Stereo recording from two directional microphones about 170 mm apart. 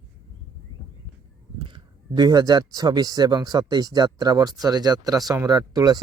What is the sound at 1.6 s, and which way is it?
Speech, 30° right (ahead or behind).